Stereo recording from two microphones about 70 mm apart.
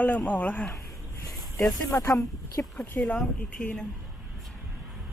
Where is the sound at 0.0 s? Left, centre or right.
Left.